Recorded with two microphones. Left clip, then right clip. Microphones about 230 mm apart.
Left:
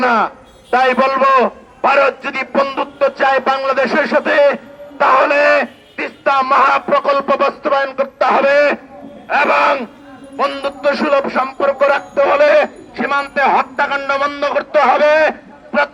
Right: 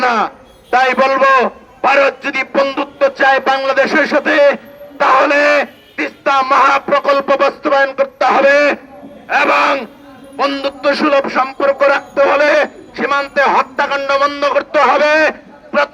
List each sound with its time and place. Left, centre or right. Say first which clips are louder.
0.0 s a man's voice: even; right